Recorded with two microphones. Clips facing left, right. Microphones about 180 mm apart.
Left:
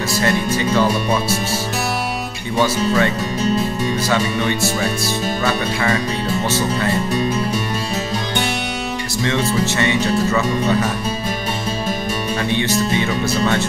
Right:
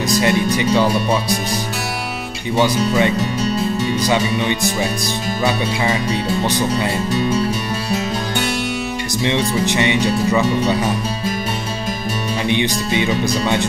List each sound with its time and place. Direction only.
0.1 s speech: 15° right (ahead or behind)
2.5 s speech: 15° right (ahead or behind)
6.4 s speech: 15° right (ahead or behind)
9.2 s speech: 15° right (ahead or behind)
12.4 s speech: 15° right (ahead or behind)